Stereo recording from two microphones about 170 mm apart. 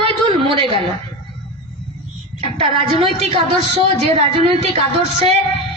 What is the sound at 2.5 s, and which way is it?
A woman's voice, 30° right (ahead or behind).